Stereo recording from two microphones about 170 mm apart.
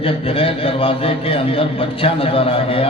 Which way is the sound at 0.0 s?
35° left (ahead or behind).